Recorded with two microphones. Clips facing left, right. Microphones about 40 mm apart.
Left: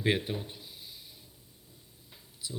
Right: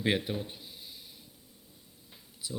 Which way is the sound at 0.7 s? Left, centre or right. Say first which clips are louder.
Even; right.